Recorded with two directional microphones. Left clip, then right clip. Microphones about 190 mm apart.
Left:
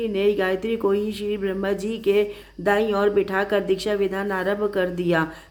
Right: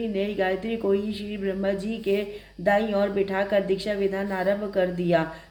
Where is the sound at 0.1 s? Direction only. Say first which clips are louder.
Left 4 dB; 40° left (ahead or behind).